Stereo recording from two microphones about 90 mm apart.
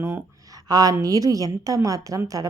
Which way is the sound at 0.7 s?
45° right (ahead or behind).